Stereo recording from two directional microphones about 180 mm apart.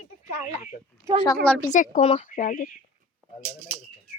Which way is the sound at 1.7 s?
45° left (ahead or behind).